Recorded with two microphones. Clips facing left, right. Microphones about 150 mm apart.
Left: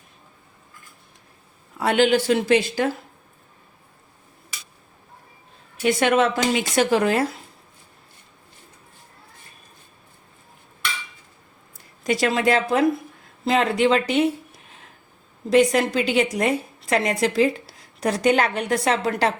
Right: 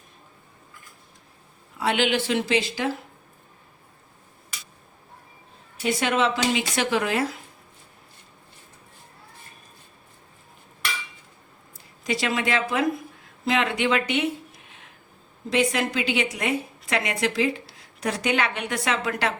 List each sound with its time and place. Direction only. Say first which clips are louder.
1.8 s speech: left 5 dB; 45° left (ahead or behind)
5.8 s speech: left 4 dB; 55° left (ahead or behind); by 7.3 s 40° left (ahead or behind)
12.0 s a woman's voice: left 5 dB; 45° left (ahead or behind)
15.4 s a woman's voice: left 6 dB; 40° left (ahead or behind)